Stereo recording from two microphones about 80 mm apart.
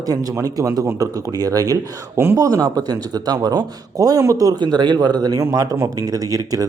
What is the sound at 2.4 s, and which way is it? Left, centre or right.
A man's voice, right.